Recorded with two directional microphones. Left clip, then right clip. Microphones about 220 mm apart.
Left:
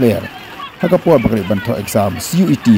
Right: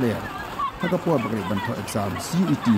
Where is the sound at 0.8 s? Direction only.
35° left (ahead or behind).